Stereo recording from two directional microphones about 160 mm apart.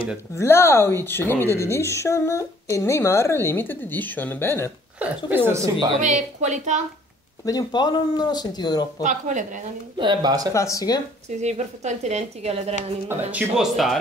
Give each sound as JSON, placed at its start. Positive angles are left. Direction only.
{"t": 0.4, "sound": "a woman's voice", "side_deg": 15}
{"t": 4.9, "sound": "speech", "side_deg": -10}
{"t": 5.9, "sound": "a woman's voice", "side_deg": -50}
{"t": 7.4, "sound": "speech", "side_deg": 25}
{"t": 9.0, "sound": "a woman's voice", "side_deg": -50}
{"t": 9.9, "sound": "speech", "side_deg": -30}
{"t": 10.5, "sound": "speech", "side_deg": 20}
{"t": 11.2, "sound": "a woman's voice", "side_deg": -45}
{"t": 13.3, "sound": "speech", "side_deg": -5}